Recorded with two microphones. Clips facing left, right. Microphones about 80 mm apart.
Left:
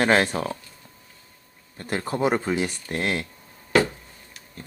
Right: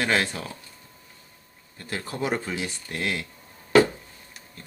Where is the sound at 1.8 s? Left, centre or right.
Left.